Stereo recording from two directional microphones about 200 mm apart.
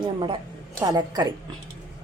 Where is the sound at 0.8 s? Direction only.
20° right (ahead or behind).